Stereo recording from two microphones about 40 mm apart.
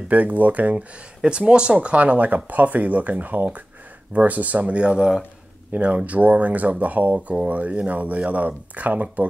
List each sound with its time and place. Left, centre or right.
0.1 s speech: right
1.2 s speech: right
5.7 s speech: right